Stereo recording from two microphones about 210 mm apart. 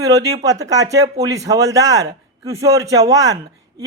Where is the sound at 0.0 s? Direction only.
15° right (ahead or behind).